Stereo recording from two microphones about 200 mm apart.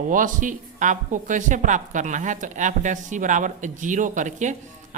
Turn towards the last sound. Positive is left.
turn(degrees=-40)  # may be behind; listen again after turning